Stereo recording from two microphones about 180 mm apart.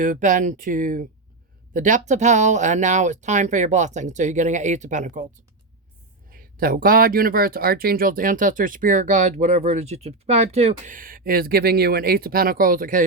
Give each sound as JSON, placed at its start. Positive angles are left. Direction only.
{"t": 0.0, "sound": "speech", "side_deg": -45}
{"t": 6.3, "sound": "speech", "side_deg": -50}